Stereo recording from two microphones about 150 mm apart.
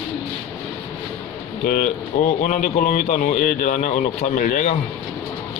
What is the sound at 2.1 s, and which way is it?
A man's voice, 50° left (ahead or behind).